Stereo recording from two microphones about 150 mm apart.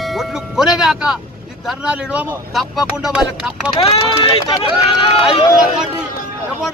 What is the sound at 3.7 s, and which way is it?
Speech, 40° left (ahead or behind).